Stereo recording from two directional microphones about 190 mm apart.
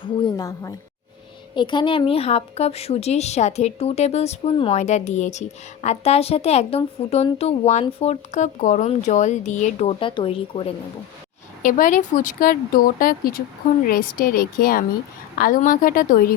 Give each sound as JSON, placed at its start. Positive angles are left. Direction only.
{"t": 0.0, "sound": "a sound", "side_deg": 25}
{"t": 1.5, "sound": "a woman's voice", "side_deg": 25}
{"t": 11.6, "sound": "speech", "side_deg": 45}